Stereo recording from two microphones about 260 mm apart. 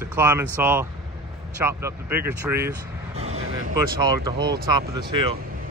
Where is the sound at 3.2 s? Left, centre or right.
Right.